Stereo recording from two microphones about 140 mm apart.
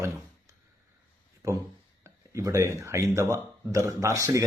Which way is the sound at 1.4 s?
25° right (ahead or behind).